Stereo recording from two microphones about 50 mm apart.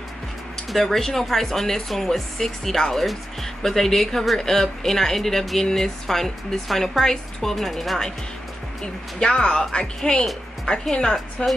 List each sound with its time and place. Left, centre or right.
0.7 s speech: centre
9.2 s speech: centre